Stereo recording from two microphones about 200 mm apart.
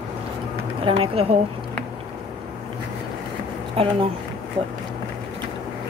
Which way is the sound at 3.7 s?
30° right (ahead or behind).